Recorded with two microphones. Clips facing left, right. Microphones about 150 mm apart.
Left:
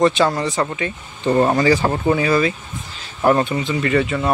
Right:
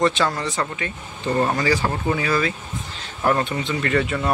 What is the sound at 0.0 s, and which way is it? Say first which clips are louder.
Speech: left 4 dB; 15° left (ahead or behind).